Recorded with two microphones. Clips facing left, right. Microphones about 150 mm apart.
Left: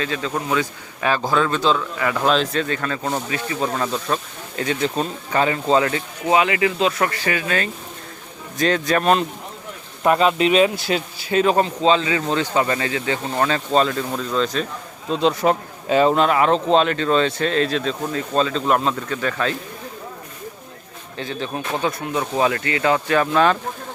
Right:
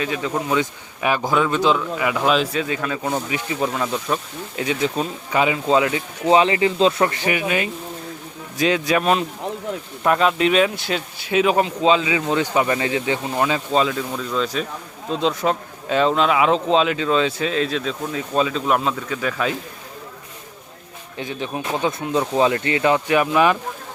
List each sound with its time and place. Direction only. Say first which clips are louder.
0.0 s speech: right 1 dB; 15° right (ahead or behind)
6.2 s speech: right 2 dB; 30° right (ahead or behind); by 19.5 s 5° right (ahead or behind)
21.2 s speech: even; 15° right (ahead or behind)